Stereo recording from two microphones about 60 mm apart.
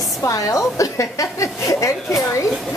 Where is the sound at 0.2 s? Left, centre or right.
Left.